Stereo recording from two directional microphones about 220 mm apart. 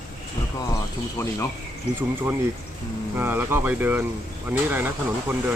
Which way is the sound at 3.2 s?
10° right (ahead or behind).